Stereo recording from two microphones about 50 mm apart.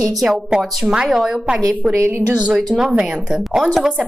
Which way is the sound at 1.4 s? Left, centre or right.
Right.